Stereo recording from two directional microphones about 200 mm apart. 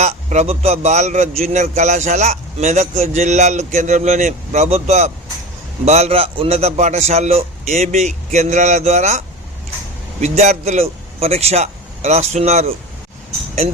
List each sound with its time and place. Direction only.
0.0 s a man's voice: 35° right (ahead or behind)